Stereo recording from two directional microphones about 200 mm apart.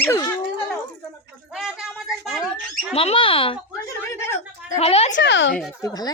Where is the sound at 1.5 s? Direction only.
Centre (ahead or behind).